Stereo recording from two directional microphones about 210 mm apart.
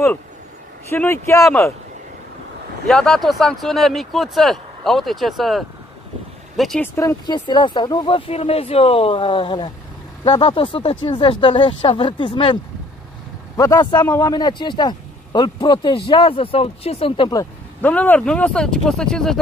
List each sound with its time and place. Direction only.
0.8 s speech: 10° left (ahead or behind)
2.9 s speech: centre (ahead or behind)
7.0 s speech: 15° left (ahead or behind)
13.6 s speech: 15° left (ahead or behind)